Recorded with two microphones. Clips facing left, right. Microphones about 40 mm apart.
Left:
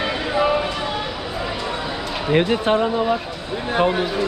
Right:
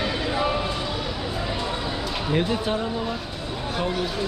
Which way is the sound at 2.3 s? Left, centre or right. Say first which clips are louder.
Left 7 dB; left.